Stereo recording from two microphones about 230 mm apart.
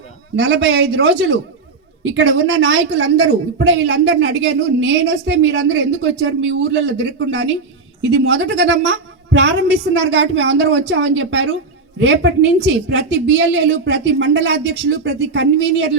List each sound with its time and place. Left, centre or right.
0.3 s a woman's voice: right